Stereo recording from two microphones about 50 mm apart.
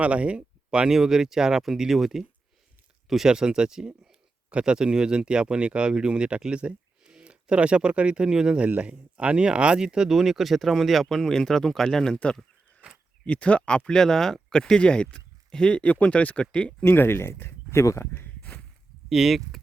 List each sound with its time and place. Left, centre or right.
0.0 s speech: right; by 16.7 s left
16.8 s speech: left
19.0 s speech: centre